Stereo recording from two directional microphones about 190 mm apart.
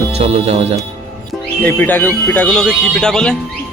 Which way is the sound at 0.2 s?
35° right (ahead or behind).